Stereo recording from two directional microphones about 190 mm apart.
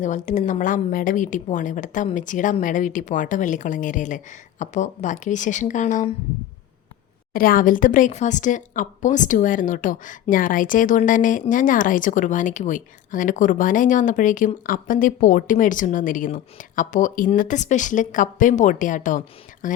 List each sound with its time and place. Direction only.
0.0 s speech: 40° left (ahead or behind)
7.3 s speech: 50° left (ahead or behind)